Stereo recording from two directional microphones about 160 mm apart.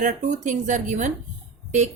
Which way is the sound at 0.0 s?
50° right (ahead or behind).